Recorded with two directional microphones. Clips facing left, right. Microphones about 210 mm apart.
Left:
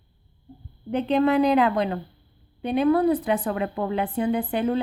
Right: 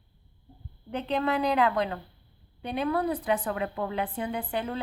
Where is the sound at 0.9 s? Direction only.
20° left (ahead or behind).